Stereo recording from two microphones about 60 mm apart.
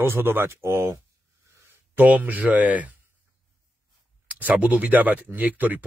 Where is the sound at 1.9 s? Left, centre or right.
Right.